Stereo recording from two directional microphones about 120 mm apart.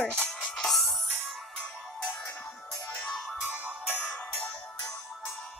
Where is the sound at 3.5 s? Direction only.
15° right (ahead or behind).